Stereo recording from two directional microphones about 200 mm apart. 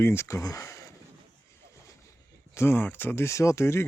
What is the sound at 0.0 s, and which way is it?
Speech, 10° left (ahead or behind).